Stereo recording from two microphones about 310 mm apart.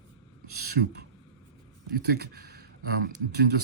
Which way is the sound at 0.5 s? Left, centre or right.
Right.